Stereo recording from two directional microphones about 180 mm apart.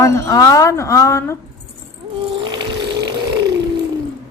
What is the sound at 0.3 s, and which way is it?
Speech, 20° left (ahead or behind).